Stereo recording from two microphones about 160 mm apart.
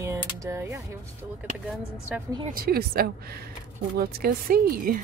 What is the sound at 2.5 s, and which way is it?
A woman's voice, 70° right (ahead or behind).